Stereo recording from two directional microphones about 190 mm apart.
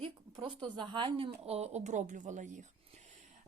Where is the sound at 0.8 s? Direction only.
25° right (ahead or behind).